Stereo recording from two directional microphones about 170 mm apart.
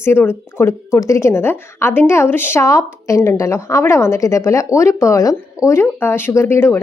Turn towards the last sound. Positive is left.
turn(degrees=15)  # may be behind; listen again after turning